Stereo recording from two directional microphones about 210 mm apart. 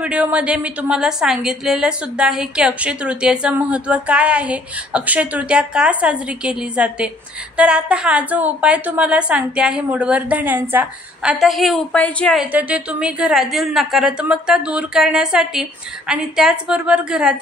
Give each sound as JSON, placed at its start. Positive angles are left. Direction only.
{"t": 0.0, "sound": "a woman's voice", "side_deg": -5}
{"t": 12.5, "sound": "a woman's voice", "side_deg": -5}